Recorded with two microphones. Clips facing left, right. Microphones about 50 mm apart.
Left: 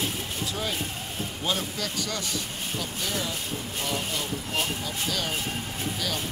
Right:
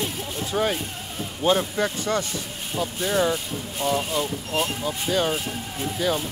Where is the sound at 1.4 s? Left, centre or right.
Right.